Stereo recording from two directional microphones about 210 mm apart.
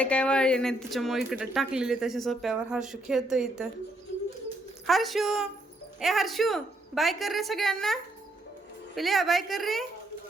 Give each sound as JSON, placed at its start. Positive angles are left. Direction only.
{"t": 0.0, "sound": "speech", "side_deg": 5}
{"t": 4.9, "sound": "speech", "side_deg": 0}
{"t": 9.0, "sound": "speech", "side_deg": 0}